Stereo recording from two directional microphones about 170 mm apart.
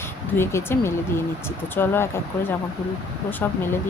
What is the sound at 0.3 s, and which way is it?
Speech, 15° left (ahead or behind).